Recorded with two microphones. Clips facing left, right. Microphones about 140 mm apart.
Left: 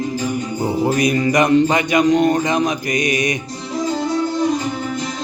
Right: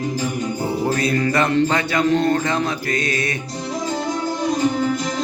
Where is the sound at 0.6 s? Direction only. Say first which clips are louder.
Left 4 dB; 15° left (ahead or behind).